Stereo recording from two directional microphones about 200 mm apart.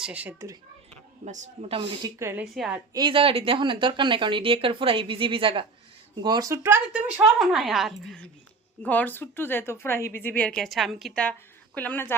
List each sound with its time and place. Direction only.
0.0 s speech: 5° right (ahead or behind)
1.2 s speech: 35° right (ahead or behind); by 2.8 s 5° right (ahead or behind)
2.9 s a woman's voice: 25° right (ahead or behind); by 12.1 s 10° left (ahead or behind)